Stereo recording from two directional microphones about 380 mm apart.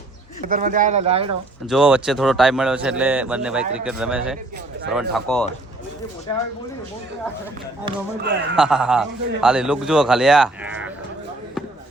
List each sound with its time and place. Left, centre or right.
0.4 s speech: right
1.6 s a man's voice: centre
8.2 s a man's voice: right
8.5 s a man's voice: centre